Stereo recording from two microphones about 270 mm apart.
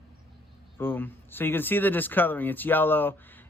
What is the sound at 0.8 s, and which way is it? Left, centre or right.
A man's voice, centre.